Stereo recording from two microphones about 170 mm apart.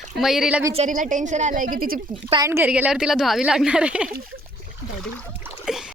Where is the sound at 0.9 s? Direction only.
50° right (ahead or behind).